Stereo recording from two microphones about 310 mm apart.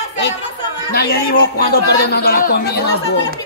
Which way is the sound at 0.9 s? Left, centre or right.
Left.